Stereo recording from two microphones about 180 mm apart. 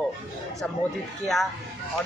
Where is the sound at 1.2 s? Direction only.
Centre (ahead or behind).